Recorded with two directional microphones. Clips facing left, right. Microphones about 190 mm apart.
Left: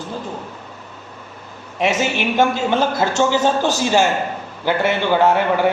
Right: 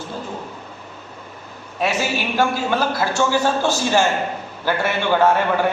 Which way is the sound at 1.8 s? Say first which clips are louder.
Left 3 dB; 20° left (ahead or behind).